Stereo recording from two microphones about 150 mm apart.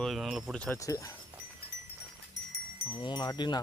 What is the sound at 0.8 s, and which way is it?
Speech, 20° left (ahead or behind).